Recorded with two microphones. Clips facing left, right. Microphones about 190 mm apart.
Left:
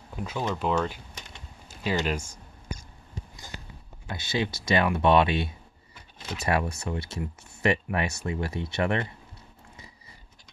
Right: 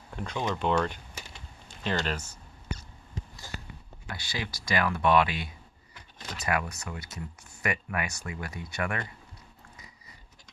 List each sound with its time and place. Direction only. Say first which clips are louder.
0.1 s speech: left 1 dB; 5° left (ahead or behind)
4.1 s speech: left 8 dB; 25° left (ahead or behind)